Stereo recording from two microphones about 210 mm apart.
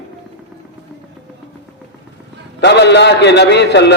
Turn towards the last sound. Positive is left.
turn(degrees=55)  # may be behind; listen again after turning